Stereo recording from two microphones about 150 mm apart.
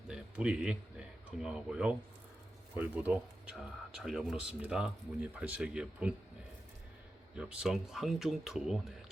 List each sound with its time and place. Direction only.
0.1 s a sound: 5° right (ahead or behind)
1.4 s speech: 5° right (ahead or behind)
7.3 s speech: 5° right (ahead or behind)